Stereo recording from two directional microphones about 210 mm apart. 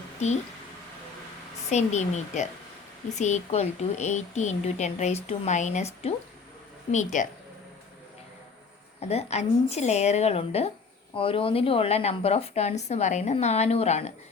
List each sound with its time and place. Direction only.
1.7 s a woman's voice: 35° left (ahead or behind)
9.0 s a woman's voice: 30° left (ahead or behind)